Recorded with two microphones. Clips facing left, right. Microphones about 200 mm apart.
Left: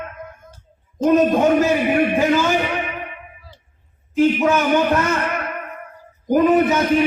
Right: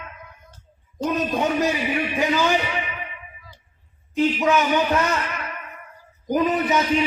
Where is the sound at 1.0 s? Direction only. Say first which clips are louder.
Left 8 dB; 55° left (ahead or behind).